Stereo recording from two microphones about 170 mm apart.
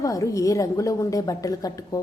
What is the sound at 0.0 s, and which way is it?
A woman's voice, 20° left (ahead or behind).